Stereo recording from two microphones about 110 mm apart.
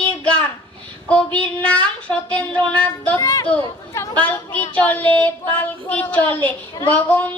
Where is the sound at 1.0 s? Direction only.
10° left (ahead or behind).